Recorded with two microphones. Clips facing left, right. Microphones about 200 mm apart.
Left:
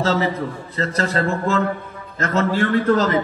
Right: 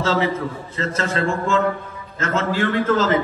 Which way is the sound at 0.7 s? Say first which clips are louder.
Left 2 dB; 35° left (ahead or behind).